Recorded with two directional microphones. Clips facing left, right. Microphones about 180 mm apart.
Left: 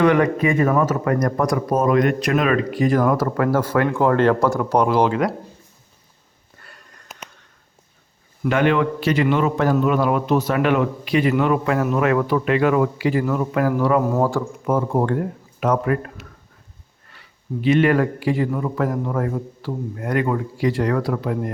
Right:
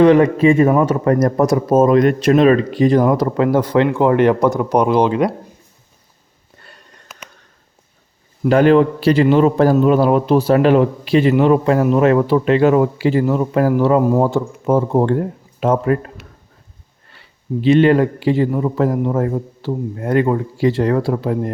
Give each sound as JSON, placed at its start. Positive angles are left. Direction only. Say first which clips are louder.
{"t": 0.0, "sound": "speech", "louder": "right 6 dB", "side_deg": -30}
{"t": 6.6, "sound": "a sound", "louder": "right 2 dB", "side_deg": -25}
{"t": 8.4, "sound": "a man's voice", "louder": "right 7 dB", "side_deg": -35}